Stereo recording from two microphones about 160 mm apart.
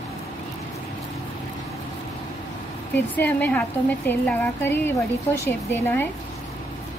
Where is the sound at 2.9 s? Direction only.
10° left (ahead or behind).